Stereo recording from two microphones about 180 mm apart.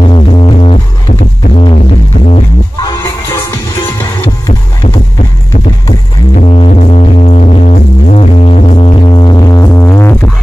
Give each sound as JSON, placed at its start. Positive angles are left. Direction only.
{"t": 0.0, "sound": "music", "side_deg": 30}
{"t": 6.3, "sound": "music", "side_deg": 35}